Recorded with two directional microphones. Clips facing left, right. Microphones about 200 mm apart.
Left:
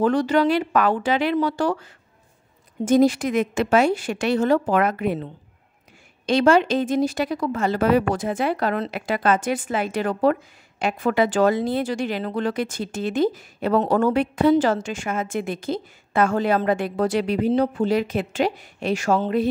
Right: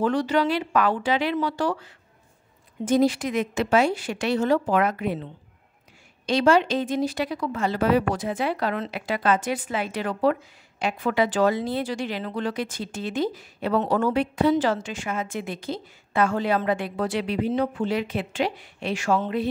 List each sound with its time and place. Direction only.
0.0 s a woman's voice: 45° left (ahead or behind)